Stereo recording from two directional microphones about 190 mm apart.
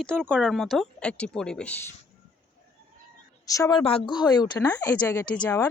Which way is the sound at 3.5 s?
15° left (ahead or behind).